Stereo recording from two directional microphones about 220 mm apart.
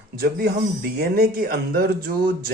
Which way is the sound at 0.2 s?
45° right (ahead or behind).